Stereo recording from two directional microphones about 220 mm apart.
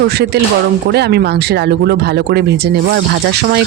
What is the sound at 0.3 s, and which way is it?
Speech, 50° right (ahead or behind).